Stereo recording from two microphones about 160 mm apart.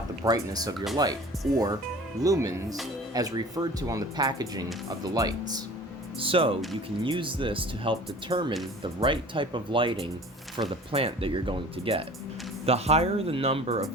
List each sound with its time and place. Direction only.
0.3 s speech: 25° right (ahead or behind)
6.1 s speech: 35° right (ahead or behind)